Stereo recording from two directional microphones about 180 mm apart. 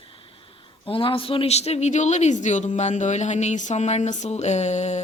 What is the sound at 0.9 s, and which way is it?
Speech, 30° left (ahead or behind).